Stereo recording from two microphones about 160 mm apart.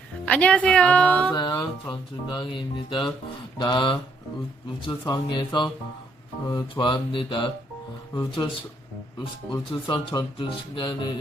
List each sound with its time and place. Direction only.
0.3 s a woman's voice: 5° left (ahead or behind)
1.3 s speech: 25° left (ahead or behind)
6.5 s mantra: 25° left (ahead or behind)
8.1 s speech: 25° left (ahead or behind)
9.5 s speech: 30° left (ahead or behind)